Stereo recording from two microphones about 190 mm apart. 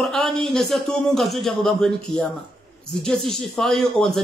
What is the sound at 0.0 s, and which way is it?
Speech, centre (ahead or behind).